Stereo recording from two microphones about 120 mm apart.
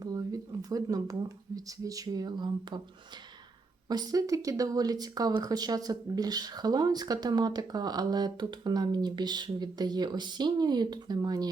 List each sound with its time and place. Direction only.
0.0 s a sound: 30° right (ahead or behind)
1.5 s speech: 30° right (ahead or behind)
3.8 s speech: 35° right (ahead or behind)